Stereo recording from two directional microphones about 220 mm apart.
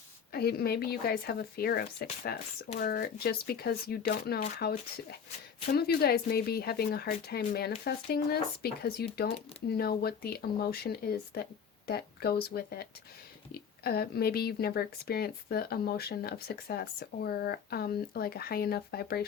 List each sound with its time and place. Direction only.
0.3 s speech: 45° left (ahead or behind)